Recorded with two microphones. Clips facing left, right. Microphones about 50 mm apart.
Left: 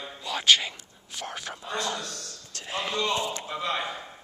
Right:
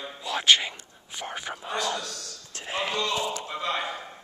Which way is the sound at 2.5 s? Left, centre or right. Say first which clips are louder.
Right 2 dB; centre.